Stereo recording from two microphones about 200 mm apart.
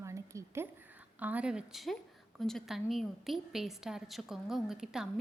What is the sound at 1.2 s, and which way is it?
A woman's voice, 5° right (ahead or behind).